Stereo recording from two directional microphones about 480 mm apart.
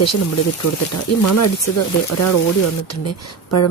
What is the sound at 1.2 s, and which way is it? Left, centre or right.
Speech, left.